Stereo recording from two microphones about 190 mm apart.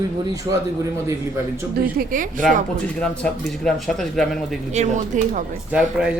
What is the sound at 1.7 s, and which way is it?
Speech, 50° right (ahead or behind).